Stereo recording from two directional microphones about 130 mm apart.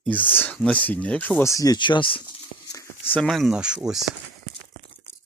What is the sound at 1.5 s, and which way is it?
Speech, 30° left (ahead or behind).